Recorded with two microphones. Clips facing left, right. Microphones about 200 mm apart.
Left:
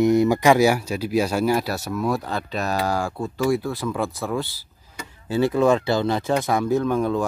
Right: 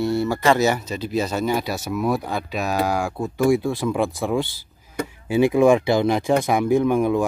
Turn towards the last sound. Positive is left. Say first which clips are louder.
# right 3 dB
turn(degrees=-15)  # may be behind; listen again after turning